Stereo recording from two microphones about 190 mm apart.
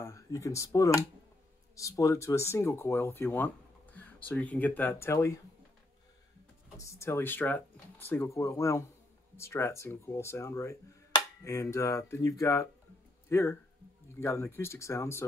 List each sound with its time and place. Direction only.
0.0 s speech: 15° left (ahead or behind)
6.8 s speech: 15° left (ahead or behind)